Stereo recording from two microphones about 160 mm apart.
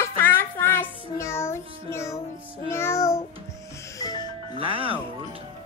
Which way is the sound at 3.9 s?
25° left (ahead or behind).